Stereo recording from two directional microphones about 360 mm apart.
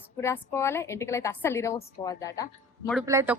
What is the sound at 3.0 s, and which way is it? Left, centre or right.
Speech, centre.